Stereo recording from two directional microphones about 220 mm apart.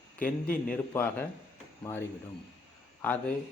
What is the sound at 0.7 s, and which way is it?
Speech, 10° left (ahead or behind).